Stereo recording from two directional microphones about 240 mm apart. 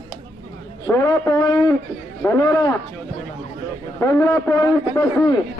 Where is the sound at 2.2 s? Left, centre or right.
Centre.